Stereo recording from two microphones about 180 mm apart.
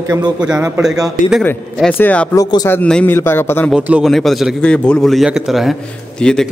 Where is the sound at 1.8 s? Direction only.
5° left (ahead or behind).